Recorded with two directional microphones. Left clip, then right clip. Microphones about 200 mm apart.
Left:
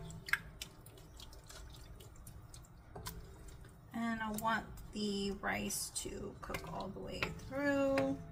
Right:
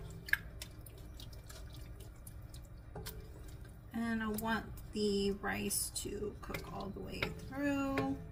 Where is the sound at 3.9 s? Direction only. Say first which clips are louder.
Right 1 dB; 15° left (ahead or behind).